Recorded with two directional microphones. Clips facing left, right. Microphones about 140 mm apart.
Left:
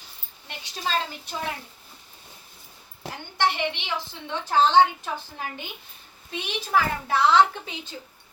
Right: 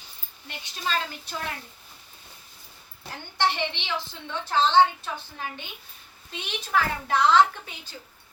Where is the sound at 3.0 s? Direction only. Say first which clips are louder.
Left 4 dB; 90° left.